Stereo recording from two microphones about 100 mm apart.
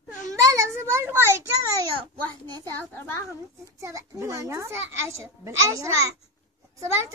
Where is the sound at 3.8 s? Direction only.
30° right (ahead or behind).